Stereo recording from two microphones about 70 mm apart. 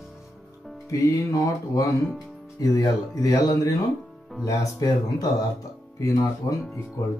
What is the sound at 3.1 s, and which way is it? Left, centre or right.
Mantra, left.